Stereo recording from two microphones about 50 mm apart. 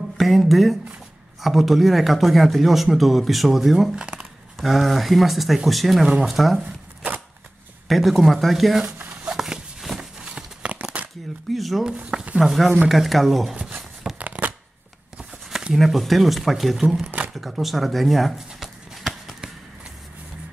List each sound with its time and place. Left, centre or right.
0.2 s a sound: centre
1.4 s speech: centre
3.9 s speech: centre
4.6 s speech: centre
9.3 s a sound: centre
10.1 s tearing: centre
11.5 s speech: centre
14.1 s shuffling cards: right
15.7 s speech: centre
18.9 s run: centre